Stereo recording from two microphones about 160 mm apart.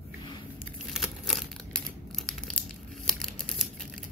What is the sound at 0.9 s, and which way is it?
Crumpling, centre (ahead or behind).